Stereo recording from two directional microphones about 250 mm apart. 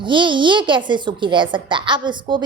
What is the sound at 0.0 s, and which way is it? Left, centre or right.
A child's voice, centre.